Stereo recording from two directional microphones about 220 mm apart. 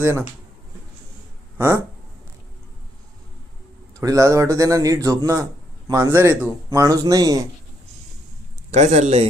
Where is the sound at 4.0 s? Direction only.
15° right (ahead or behind).